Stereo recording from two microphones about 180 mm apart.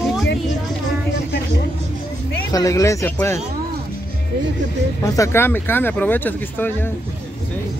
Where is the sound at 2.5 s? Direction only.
20° left (ahead or behind).